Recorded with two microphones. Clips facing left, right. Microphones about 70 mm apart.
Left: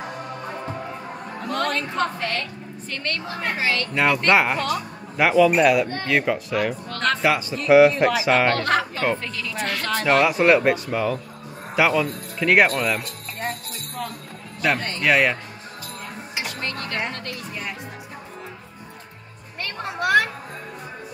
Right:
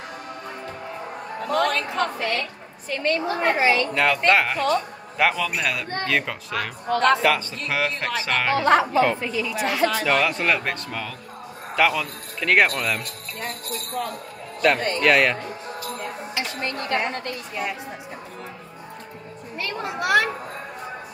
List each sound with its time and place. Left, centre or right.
1.5 s a woman's voice: centre
3.9 s speech: centre
6.9 s a woman's voice: centre
7.2 s speech: centre
8.5 s a woman's voice: centre
10.0 s speech: centre
14.6 s speech: centre
16.6 s a woman's voice: right
19.6 s speech: centre